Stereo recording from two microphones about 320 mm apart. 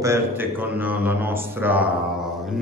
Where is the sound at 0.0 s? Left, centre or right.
Centre.